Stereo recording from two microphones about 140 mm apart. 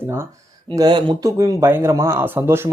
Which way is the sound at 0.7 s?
30° right (ahead or behind).